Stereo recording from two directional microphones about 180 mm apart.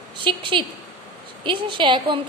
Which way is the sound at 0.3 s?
25° right (ahead or behind).